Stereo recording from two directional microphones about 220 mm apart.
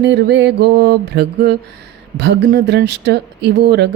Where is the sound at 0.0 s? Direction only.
55° right (ahead or behind).